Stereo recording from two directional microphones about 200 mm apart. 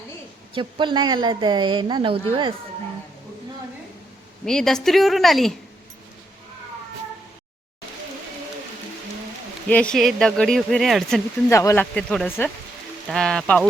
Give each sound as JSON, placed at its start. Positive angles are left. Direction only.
{"t": 0.5, "sound": "a woman's voice", "side_deg": -25}
{"t": 4.4, "sound": "speech", "side_deg": 5}
{"t": 9.6, "sound": "speech", "side_deg": 5}
{"t": 11.4, "sound": "speech", "side_deg": 15}